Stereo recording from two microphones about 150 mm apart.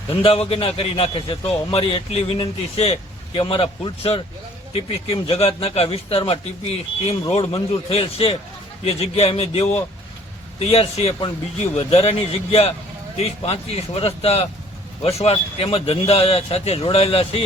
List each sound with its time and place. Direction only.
0.1 s a man's voice: 40° left (ahead or behind)